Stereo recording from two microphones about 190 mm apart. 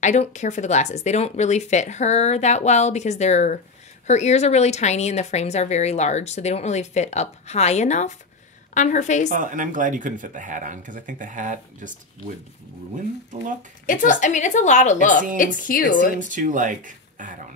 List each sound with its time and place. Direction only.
0.0 s speech: 40° left (ahead or behind)
9.3 s speech: 45° right (ahead or behind)
13.3 s speech: 45° right (ahead or behind)
13.8 s a woman's voice: 40° left (ahead or behind)
16.2 s speech: 45° right (ahead or behind)